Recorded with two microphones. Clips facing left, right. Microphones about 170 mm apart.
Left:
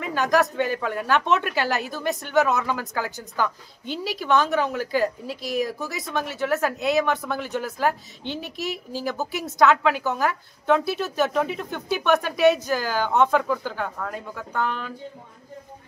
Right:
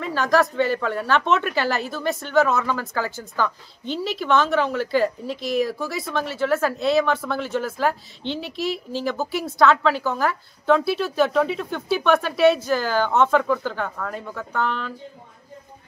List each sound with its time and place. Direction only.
0.0 s speech: 15° left (ahead or behind)
5.4 s speech: 40° left (ahead or behind)
5.8 s speech: 20° left (ahead or behind)
8.4 s speech: 45° left (ahead or behind)
8.9 s speech: 15° left (ahead or behind)
11.5 s speech: 15° left (ahead or behind)